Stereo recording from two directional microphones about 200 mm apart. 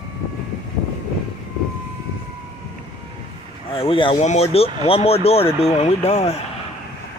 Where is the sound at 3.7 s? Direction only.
25° left (ahead or behind).